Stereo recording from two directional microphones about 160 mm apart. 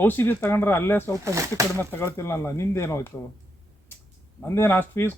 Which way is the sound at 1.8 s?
15° left (ahead or behind).